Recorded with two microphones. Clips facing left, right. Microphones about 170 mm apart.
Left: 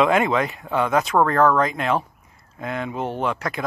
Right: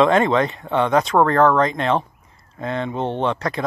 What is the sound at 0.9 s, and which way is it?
Speech, 5° left (ahead or behind).